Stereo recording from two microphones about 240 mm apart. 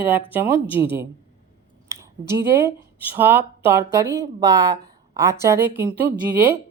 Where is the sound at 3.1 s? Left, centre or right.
Centre.